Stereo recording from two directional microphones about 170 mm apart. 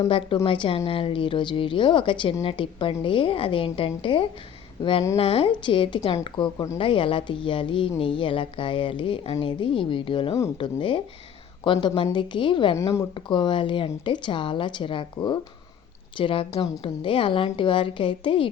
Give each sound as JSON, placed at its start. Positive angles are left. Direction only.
{"t": 0.1, "sound": "a woman's voice", "side_deg": 30}
{"t": 12.7, "sound": "speech", "side_deg": 15}
{"t": 13.3, "sound": "a woman's voice", "side_deg": 30}